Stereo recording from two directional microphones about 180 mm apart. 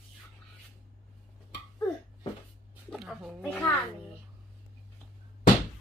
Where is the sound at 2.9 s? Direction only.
Centre (ahead or behind).